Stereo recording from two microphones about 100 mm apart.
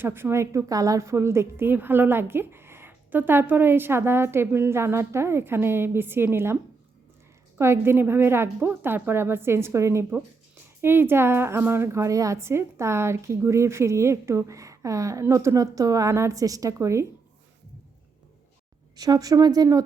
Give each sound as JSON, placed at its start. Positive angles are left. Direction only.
{"t": 0.0, "sound": "a woman's voice", "side_deg": -20}
{"t": 7.6, "sound": "a woman's voice", "side_deg": -25}
{"t": 18.9, "sound": "speech", "side_deg": -40}